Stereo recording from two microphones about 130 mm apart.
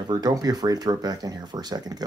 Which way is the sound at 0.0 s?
30° right (ahead or behind).